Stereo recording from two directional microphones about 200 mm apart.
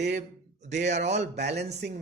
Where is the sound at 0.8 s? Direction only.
35° right (ahead or behind).